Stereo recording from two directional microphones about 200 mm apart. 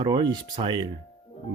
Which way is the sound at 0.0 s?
20° right (ahead or behind).